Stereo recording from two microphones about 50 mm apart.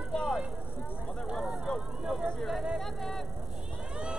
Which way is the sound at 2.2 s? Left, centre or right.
Centre.